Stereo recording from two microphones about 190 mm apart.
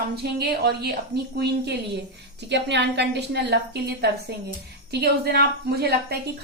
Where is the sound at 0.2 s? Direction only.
60° right (ahead or behind).